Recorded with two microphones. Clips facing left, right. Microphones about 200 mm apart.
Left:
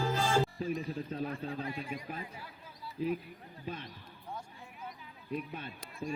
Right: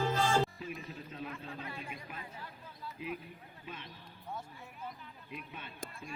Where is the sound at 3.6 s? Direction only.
40° left (ahead or behind).